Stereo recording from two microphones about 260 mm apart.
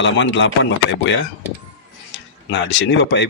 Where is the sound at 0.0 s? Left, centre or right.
Left.